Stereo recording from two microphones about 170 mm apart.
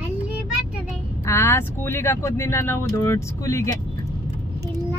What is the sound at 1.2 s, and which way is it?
Speech, 15° left (ahead or behind).